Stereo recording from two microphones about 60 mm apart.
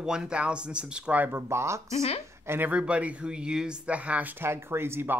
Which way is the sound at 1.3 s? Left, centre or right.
Right.